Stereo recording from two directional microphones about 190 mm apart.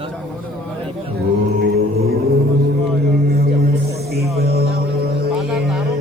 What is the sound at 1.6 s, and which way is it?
Music, 55° right (ahead or behind).